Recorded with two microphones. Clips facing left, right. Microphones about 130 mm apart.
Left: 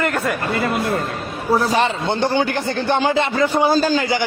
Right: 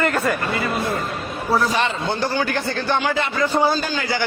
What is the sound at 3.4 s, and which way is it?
Speech, 15° left (ahead or behind).